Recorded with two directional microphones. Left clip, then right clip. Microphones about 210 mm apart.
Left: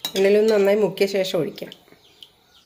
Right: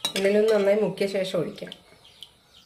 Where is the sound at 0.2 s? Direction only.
45° left (ahead or behind).